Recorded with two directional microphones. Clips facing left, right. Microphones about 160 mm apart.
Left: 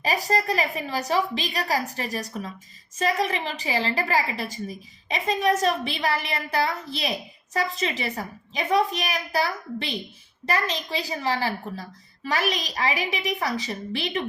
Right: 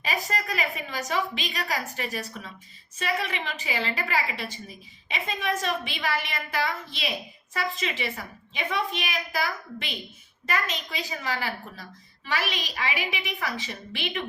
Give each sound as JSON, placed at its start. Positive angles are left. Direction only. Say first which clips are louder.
{"t": 0.0, "sound": "a woman's voice", "louder": "left 6 dB", "side_deg": 35}